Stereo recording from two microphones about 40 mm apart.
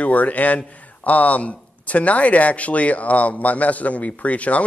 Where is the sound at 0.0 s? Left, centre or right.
Left.